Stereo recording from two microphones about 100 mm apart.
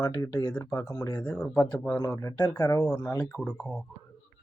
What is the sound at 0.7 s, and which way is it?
Speech, 25° left (ahead or behind).